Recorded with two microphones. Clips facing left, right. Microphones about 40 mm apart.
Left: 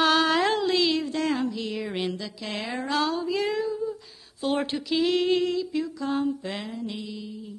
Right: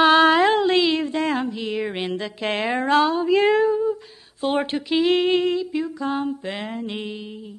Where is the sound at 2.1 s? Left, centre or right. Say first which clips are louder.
Right 7 dB; right.